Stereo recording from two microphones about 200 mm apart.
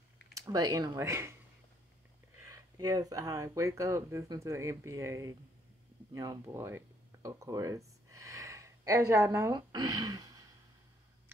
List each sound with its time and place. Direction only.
0.3 s speech: 15° right (ahead or behind)
2.4 s speech: 15° right (ahead or behind)